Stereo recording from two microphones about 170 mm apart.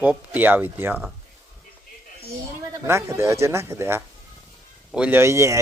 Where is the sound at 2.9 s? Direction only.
15° right (ahead or behind).